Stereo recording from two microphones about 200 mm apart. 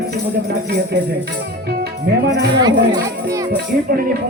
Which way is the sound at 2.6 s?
20° right (ahead or behind).